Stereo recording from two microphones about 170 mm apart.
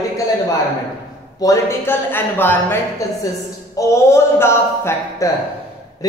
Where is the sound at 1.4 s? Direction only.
15° left (ahead or behind).